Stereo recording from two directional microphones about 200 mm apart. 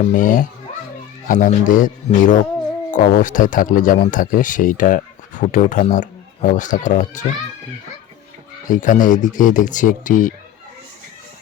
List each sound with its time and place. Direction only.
0.0 s speech: 40° left (ahead or behind)
8.7 s speech: 40° left (ahead or behind)